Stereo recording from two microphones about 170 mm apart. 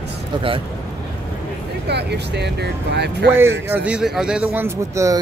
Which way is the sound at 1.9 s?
80° right.